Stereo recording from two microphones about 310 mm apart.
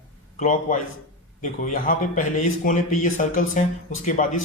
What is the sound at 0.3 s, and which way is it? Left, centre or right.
A man's voice, left.